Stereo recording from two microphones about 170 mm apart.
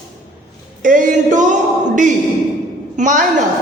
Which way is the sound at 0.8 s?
50° right (ahead or behind).